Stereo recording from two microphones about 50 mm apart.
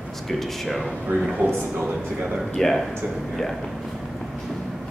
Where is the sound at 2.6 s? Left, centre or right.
Centre.